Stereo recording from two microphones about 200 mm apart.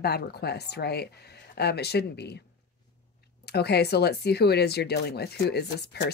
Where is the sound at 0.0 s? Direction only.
50° left (ahead or behind).